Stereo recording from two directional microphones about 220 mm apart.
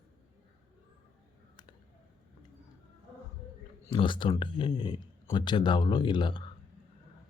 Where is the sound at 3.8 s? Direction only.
20° left (ahead or behind).